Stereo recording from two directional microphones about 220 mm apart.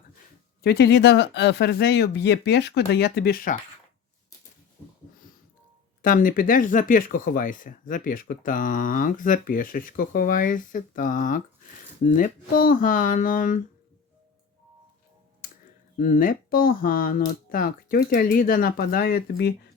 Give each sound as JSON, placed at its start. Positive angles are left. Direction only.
{"t": 0.6, "sound": "speech", "side_deg": 50}
{"t": 6.0, "sound": "speech", "side_deg": 40}
{"t": 16.0, "sound": "speech", "side_deg": 40}